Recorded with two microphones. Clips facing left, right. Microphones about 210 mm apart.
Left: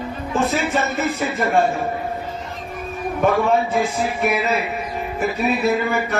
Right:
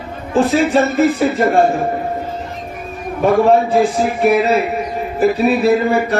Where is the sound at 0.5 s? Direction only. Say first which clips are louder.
Right 8 dB; 35° right (ahead or behind).